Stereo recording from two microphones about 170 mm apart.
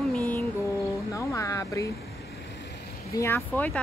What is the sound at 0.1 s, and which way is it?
Music, 10° left (ahead or behind).